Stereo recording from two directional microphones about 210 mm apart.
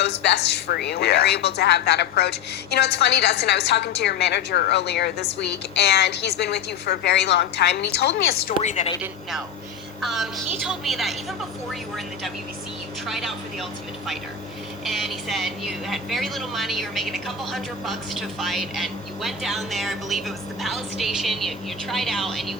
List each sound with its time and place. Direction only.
0.0 s a woman's voice: 55° left (ahead or behind)
8.6 s a woman's voice: 35° left (ahead or behind)
10.0 s a woman's voice: centre (ahead or behind)
13.1 s a woman's voice: centre (ahead or behind)
14.8 s a woman's voice: centre (ahead or behind)